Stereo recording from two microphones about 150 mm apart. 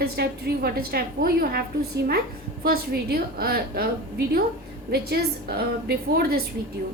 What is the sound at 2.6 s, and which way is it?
A woman's voice, 90° right.